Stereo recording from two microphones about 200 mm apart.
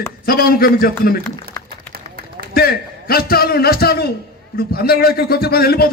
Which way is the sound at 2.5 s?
50° left (ahead or behind).